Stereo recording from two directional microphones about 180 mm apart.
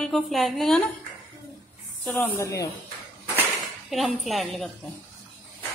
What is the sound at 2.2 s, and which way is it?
Speech, 15° left (ahead or behind).